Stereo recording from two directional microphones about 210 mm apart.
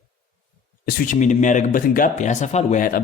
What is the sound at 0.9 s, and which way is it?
Speech, 35° left (ahead or behind).